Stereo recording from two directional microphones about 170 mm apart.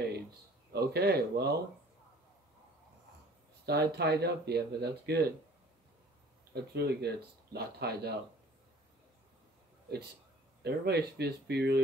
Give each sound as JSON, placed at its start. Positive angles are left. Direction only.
{"t": 0.7, "sound": "speech", "side_deg": -70}
{"t": 3.6, "sound": "speech", "side_deg": -75}
{"t": 6.5, "sound": "speech", "side_deg": -70}
{"t": 10.6, "sound": "speech", "side_deg": -70}